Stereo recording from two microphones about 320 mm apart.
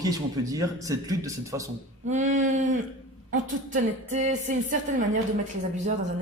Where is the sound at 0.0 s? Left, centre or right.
Centre.